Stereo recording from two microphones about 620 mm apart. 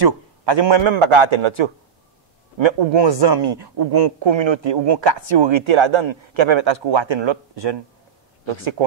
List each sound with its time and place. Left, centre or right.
0.0 s a woman's voice: right